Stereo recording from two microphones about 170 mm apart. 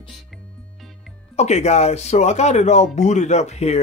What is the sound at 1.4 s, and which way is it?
Speech, 40° left (ahead or behind).